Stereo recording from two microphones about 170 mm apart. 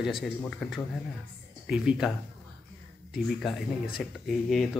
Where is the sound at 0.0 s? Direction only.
Centre (ahead or behind).